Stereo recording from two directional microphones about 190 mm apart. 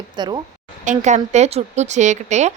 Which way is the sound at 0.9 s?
40° right (ahead or behind).